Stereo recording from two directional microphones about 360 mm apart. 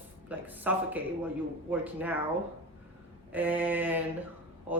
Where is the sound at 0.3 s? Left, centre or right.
Centre.